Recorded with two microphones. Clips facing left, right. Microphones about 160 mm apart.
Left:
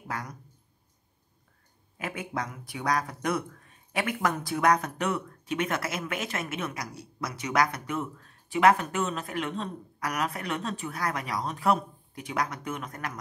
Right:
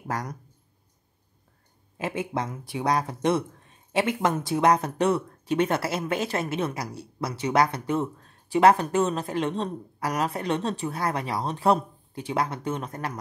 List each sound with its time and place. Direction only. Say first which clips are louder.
0.1 s speech: right 5 dB; 40° right (ahead or behind)
2.0 s speech: right 5 dB; 25° right (ahead or behind)